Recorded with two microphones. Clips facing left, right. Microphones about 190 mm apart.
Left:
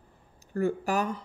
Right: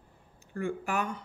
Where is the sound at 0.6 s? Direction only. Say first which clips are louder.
Left 5 dB; 40° left (ahead or behind).